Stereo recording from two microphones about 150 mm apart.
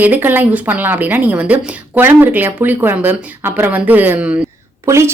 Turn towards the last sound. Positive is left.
turn(degrees=-20)  # may be behind; listen again after turning